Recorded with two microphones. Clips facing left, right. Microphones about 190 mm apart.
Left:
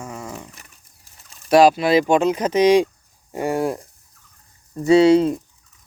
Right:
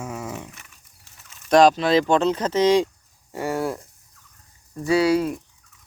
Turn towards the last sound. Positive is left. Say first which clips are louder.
# left 6 dB
turn(degrees=25)  # may be behind; listen again after turning